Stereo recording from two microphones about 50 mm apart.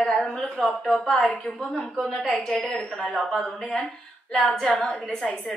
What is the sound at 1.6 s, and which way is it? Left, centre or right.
A woman's voice, centre.